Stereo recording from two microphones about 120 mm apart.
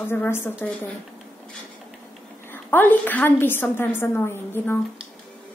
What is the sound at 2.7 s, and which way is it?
A woman's voice, 15° left (ahead or behind).